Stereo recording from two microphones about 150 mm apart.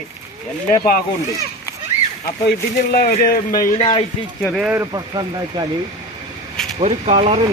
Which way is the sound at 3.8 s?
35° left (ahead or behind).